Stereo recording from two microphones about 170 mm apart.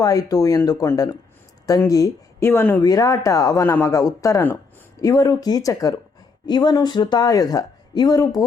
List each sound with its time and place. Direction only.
0.0 s speech: 20° left (ahead or behind)